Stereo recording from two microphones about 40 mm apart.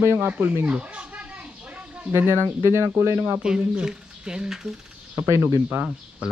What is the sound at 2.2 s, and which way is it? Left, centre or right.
Speech, right.